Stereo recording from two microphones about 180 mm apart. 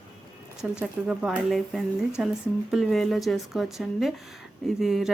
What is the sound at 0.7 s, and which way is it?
Speech, 5° right (ahead or behind).